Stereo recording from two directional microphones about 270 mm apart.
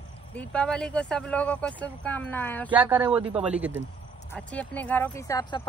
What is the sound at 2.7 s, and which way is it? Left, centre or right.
Speech, centre.